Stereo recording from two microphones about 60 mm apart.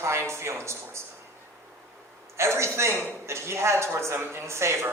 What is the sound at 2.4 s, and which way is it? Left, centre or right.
A man's voice, right.